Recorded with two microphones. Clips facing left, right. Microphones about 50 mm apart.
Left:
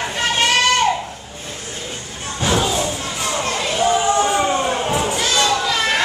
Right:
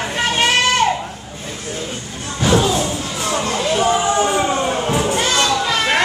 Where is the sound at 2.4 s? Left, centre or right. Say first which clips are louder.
Right 3 dB; centre.